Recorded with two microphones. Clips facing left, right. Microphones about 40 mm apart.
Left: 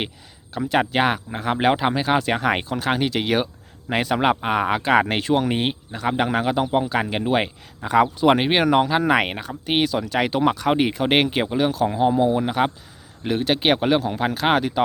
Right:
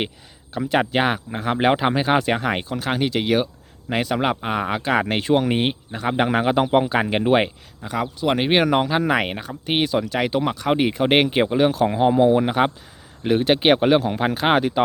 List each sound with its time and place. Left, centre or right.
0.5 s speech: centre
2.5 s speech: centre
5.2 s speech: centre
7.8 s speech: centre
8.4 s speech: centre